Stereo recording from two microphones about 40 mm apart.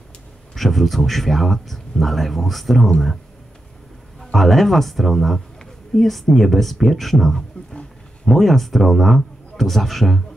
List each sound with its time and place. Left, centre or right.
0.6 s a man's voice: centre
4.2 s a man's voice: centre
7.5 s a sound: left
8.3 s a man's voice: centre